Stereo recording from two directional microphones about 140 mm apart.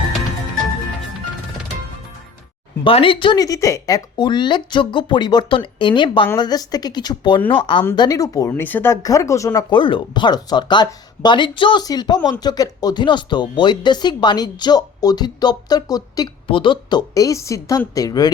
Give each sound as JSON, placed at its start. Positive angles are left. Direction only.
{"t": 2.8, "sound": "speech", "side_deg": 40}
{"t": 7.9, "sound": "speech", "side_deg": 25}
{"t": 17.2, "sound": "speech", "side_deg": 20}